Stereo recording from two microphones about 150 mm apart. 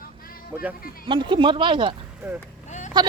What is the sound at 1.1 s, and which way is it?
Speech, 30° right (ahead or behind).